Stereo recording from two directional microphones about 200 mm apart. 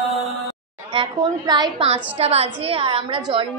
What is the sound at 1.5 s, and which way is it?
A woman's voice, 25° right (ahead or behind).